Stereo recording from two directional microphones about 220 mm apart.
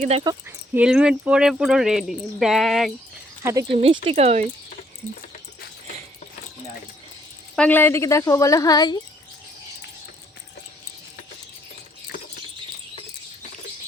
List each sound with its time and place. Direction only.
0.4 s speech: 5° right (ahead or behind)
3.4 s speech: 15° right (ahead or behind)
3.8 s speech: 25° right (ahead or behind)
7.5 s speech: 5° left (ahead or behind)